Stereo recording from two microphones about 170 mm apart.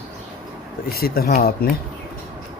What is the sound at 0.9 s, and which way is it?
Speech, 60° left (ahead or behind).